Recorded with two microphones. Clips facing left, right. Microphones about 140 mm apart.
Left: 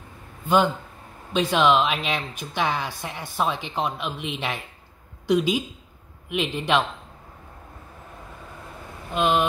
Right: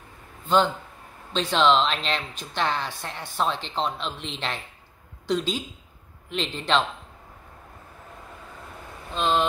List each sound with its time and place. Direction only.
1.3 s a woman's voice: 10° left (ahead or behind)
9.1 s a woman's voice: 15° left (ahead or behind)